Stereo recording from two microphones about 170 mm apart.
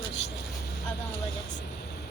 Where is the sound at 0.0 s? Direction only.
40° left (ahead or behind).